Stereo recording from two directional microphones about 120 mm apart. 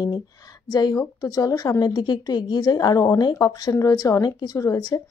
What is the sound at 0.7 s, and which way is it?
Speech, 35° left (ahead or behind).